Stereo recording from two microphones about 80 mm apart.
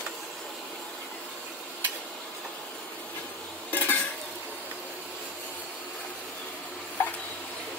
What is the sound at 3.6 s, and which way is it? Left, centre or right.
Dishes, left.